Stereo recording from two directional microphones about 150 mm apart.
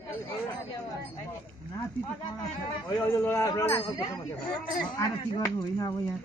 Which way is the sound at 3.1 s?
20° left (ahead or behind).